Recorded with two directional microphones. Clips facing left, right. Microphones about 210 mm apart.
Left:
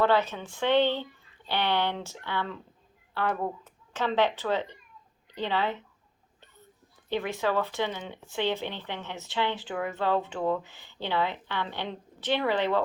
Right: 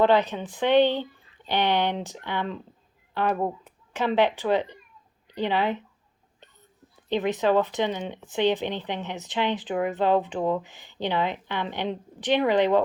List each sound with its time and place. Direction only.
0.0 s speech: 15° right (ahead or behind)
7.1 s speech: 20° right (ahead or behind)